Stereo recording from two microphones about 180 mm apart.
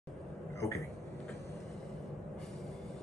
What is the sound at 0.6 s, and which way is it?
Speech, 15° left (ahead or behind).